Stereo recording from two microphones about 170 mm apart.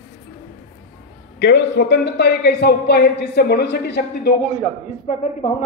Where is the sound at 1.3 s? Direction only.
85° left.